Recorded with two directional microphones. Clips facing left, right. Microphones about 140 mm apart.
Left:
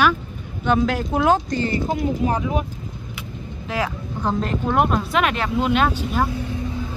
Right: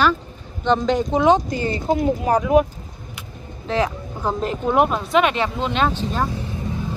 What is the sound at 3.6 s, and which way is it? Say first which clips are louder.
Speech: right 4 dB; 25° right (ahead or behind).